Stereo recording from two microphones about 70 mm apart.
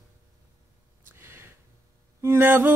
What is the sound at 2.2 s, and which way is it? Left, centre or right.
Speech, right.